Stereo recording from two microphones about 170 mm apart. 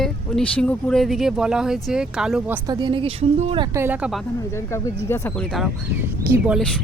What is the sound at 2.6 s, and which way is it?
Speech, 25° right (ahead or behind).